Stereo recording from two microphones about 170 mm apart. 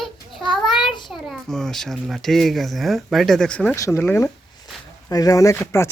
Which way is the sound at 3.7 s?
15° left (ahead or behind).